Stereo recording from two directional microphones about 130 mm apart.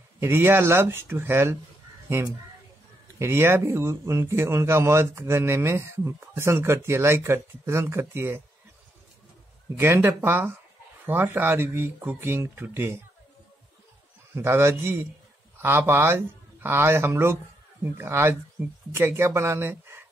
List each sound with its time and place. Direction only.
0.2 s speech: 20° right (ahead or behind)
3.2 s speech: 20° right (ahead or behind)
9.8 s speech: 15° right (ahead or behind)
14.3 s speech: 20° right (ahead or behind)